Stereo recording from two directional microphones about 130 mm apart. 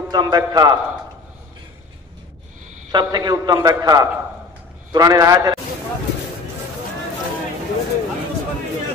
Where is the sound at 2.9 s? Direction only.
30° right (ahead or behind).